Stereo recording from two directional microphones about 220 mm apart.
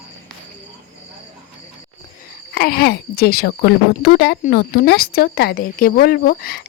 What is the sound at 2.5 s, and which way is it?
A woman's voice, 45° left (ahead or behind).